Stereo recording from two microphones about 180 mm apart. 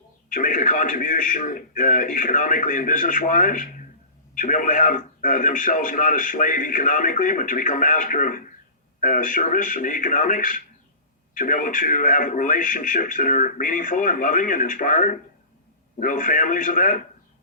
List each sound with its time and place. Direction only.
0.3 s a man's voice: 45° left (ahead or behind)